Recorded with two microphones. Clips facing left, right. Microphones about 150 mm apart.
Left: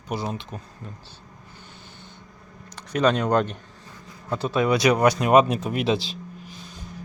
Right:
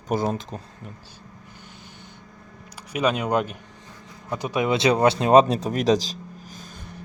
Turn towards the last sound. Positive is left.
turn(degrees=-45)  # may be behind; listen again after turning